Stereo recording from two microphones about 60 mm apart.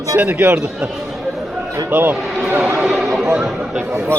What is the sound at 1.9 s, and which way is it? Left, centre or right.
Speech, right.